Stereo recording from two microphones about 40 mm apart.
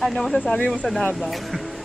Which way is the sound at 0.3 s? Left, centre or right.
Left.